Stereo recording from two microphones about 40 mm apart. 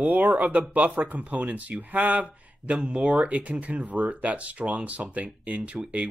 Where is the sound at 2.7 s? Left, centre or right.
Right.